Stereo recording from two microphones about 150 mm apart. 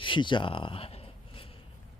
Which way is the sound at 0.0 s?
35° left (ahead or behind).